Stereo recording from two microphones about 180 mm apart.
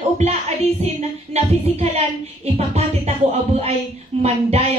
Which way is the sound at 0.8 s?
35° right (ahead or behind).